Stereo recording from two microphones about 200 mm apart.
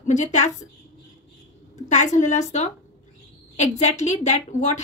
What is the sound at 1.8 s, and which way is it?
A woman's voice, 35° left (ahead or behind).